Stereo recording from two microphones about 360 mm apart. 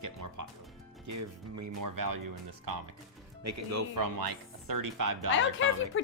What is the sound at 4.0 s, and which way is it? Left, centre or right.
Speech, right.